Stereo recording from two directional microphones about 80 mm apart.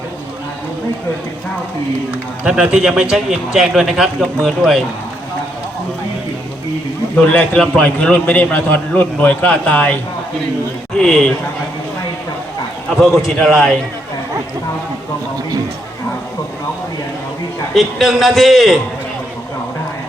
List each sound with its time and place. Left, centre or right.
2.4 s a man's voice: centre
7.2 s a man's voice: centre
10.9 s a man's voice: centre
13.2 s a man's voice: centre
17.7 s a man's voice: centre